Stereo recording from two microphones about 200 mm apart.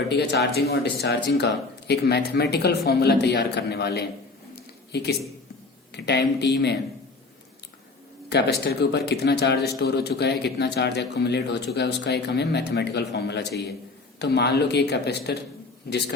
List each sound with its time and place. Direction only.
0.1 s a man's voice: 55° left (ahead or behind)
4.5 s a sound: 55° left (ahead or behind)
5.9 s a man's voice: 60° left (ahead or behind)
8.3 s a man's voice: 55° left (ahead or behind)